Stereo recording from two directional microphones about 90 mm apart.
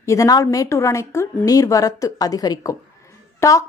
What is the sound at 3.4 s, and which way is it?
Speech, 30° left (ahead or behind).